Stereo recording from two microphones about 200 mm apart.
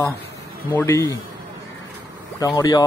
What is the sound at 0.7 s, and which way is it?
Speech, 15° left (ahead or behind).